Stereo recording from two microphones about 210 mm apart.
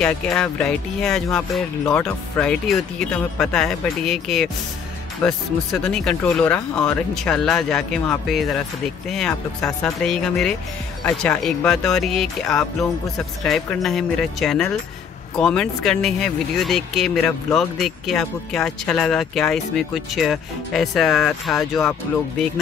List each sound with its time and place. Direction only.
0.0 s speech: 5° left (ahead or behind)